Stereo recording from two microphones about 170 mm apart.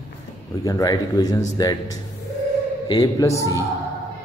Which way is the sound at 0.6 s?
20° left (ahead or behind).